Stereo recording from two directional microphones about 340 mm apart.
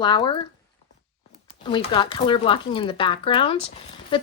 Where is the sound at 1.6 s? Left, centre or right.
Centre.